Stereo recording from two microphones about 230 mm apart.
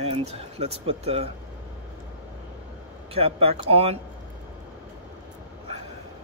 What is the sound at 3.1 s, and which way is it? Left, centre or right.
Speech, right.